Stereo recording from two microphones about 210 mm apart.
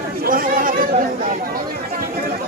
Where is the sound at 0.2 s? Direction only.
45° right (ahead or behind).